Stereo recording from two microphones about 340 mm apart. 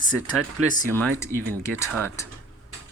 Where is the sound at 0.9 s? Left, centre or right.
Centre.